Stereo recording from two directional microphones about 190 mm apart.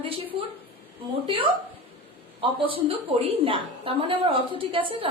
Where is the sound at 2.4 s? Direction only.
25° right (ahead or behind).